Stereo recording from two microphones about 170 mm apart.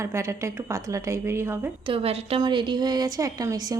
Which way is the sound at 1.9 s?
35° right (ahead or behind).